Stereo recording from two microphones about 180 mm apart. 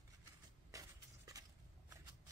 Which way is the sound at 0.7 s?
15° right (ahead or behind).